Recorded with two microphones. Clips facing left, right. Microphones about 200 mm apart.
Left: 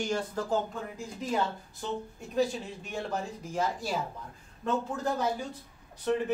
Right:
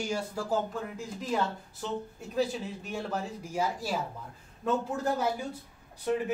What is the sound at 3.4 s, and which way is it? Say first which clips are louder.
Speech: even; 10° right (ahead or behind).